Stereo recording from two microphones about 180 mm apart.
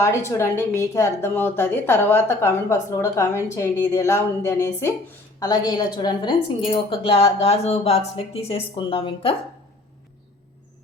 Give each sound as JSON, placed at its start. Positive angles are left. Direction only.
{"t": 0.3, "sound": "a woman's voice", "side_deg": 15}